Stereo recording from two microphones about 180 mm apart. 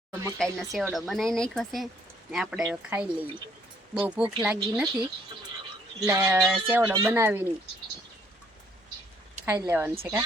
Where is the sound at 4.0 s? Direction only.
5° right (ahead or behind).